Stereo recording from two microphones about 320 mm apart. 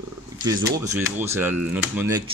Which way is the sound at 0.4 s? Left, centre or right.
Centre.